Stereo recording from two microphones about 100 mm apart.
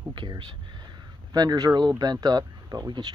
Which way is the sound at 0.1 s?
50° right (ahead or behind).